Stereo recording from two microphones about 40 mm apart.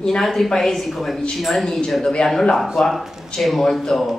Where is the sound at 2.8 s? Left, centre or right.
Centre.